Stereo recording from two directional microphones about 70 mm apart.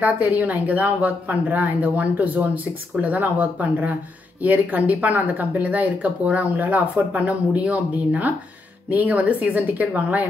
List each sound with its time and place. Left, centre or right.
0.0 s speech: right